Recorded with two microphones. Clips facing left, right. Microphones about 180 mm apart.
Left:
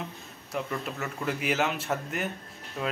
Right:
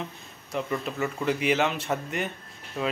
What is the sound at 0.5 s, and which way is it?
Speech, centre (ahead or behind).